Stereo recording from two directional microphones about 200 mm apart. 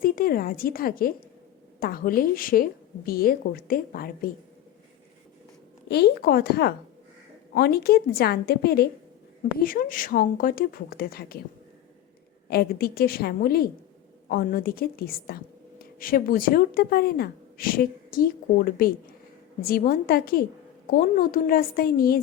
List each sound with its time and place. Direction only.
0.0 s speech: 45° left (ahead or behind)
5.9 s speech: 55° left (ahead or behind)
12.5 s speech: 50° left (ahead or behind)